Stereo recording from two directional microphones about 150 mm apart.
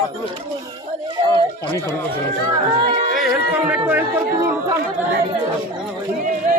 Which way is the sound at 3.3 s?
10° right (ahead or behind).